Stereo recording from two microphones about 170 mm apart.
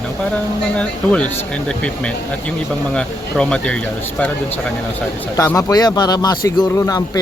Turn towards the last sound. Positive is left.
turn(degrees=20)  # may be behind; listen again after turning